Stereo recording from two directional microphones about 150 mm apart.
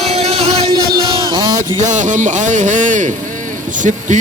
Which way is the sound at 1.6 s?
55° right (ahead or behind).